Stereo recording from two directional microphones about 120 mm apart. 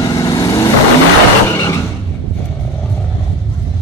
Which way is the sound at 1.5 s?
25° left (ahead or behind).